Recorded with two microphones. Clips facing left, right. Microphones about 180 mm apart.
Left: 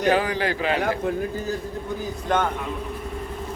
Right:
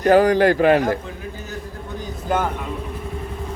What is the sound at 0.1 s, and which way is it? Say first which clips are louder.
Speech: right 10 dB; 45° right (ahead or behind).